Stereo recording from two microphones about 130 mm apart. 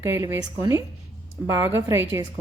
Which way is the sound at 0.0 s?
20° right (ahead or behind).